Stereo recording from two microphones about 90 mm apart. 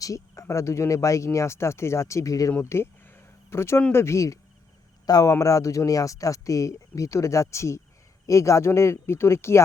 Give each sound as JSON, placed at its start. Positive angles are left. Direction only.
{"t": 0.0, "sound": "speech", "side_deg": 40}
{"t": 2.5, "sound": "speech", "side_deg": 25}
{"t": 5.0, "sound": "speech", "side_deg": 45}